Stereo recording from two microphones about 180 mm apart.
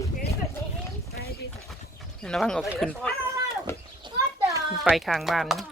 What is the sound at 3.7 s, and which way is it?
Children playing, 15° left (ahead or behind).